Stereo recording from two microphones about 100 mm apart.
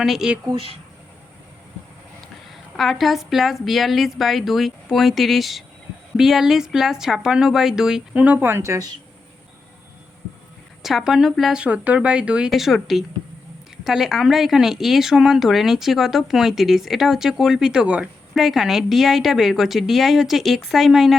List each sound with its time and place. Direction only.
0.0 s speech: 5° right (ahead or behind)
0.5 s speech: 65° right (ahead or behind)
2.7 s speech: centre (ahead or behind); by 8.9 s 30° right (ahead or behind)
10.8 s a woman's voice: 5° right (ahead or behind)